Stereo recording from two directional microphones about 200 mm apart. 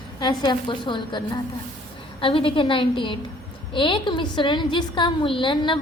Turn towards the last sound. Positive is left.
turn(degrees=25)  # may be behind; listen again after turning